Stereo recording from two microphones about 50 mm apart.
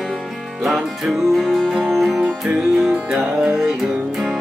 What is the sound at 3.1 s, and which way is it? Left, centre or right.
Music, centre.